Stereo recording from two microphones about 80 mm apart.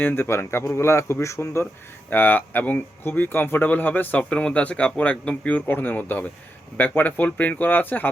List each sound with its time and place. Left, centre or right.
0.0 s speech: left
2.0 s a man's voice: left